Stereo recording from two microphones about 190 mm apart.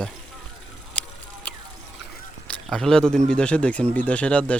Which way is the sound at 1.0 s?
5° left (ahead or behind).